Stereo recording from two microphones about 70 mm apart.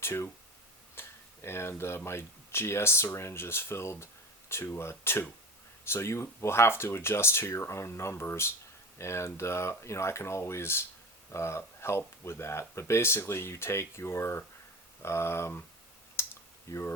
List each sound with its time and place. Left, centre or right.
0.0 s speech: left
0.9 s a sound: left
2.0 s speech: left
16.2 s clicking: left
16.7 s speech: left